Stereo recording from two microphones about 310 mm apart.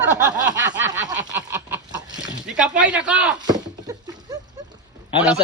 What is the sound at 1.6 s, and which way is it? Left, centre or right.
Chicken, centre.